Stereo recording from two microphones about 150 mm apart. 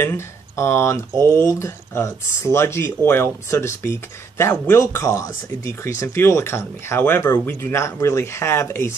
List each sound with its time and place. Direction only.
0.0 s speech: 15° left (ahead or behind)